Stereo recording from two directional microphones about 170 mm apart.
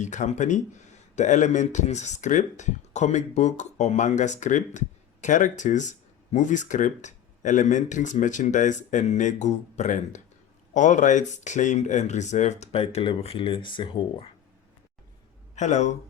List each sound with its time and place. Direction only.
0.0 s speech: 45° left (ahead or behind); by 14.3 s 30° left (ahead or behind)
15.5 s speech: 45° left (ahead or behind)